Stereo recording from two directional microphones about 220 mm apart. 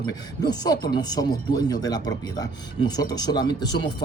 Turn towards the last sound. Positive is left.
turn(degrees=20)  # may be behind; listen again after turning